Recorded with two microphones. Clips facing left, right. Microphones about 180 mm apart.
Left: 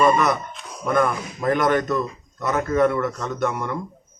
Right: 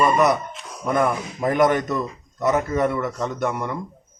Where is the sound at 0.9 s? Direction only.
15° right (ahead or behind).